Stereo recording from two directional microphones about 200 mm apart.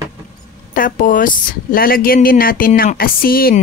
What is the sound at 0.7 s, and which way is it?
A woman's voice, 45° left (ahead or behind).